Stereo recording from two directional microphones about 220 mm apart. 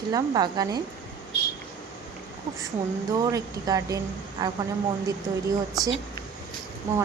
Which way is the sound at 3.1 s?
15° right (ahead or behind).